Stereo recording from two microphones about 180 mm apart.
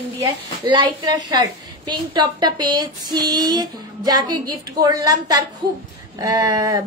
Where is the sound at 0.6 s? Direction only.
25° right (ahead or behind).